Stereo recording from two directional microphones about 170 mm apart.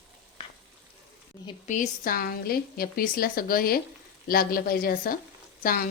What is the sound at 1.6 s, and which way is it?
A woman's voice, 45° left (ahead or behind).